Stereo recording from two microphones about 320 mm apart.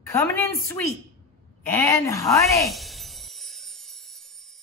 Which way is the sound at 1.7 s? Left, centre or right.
Centre.